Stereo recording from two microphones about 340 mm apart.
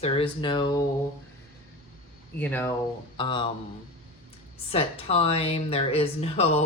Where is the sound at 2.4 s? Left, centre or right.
Centre.